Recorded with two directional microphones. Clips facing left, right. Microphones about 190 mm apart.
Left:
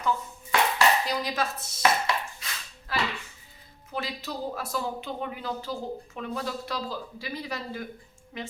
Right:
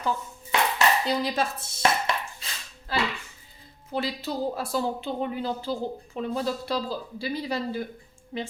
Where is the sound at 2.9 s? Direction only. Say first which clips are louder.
Right 2 dB; 30° right (ahead or behind).